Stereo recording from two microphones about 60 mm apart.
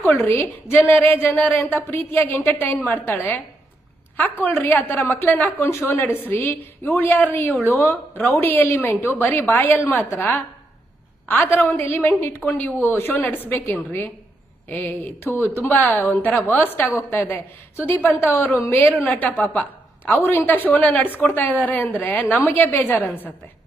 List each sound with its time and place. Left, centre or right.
0.3 s a woman's voice: left
7.7 s a woman's voice: left
8.2 s a woman's voice: left
12.4 s a woman's voice: left
14.7 s a woman's voice: left
18.9 s a woman's voice: left
20.2 s a woman's voice: left
20.7 s a woman's voice: left
21.0 s a woman's voice: left
22.5 s a woman's voice: left